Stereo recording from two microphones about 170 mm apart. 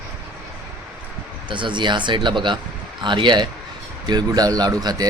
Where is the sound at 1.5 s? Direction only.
30° right (ahead or behind).